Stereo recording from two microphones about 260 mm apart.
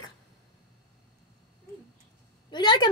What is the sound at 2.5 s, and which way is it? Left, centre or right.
Speech, centre.